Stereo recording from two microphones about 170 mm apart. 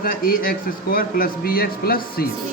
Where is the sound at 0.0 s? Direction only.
60° left (ahead or behind).